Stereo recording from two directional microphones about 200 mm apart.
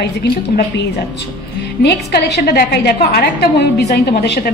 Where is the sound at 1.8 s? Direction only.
55° left (ahead or behind).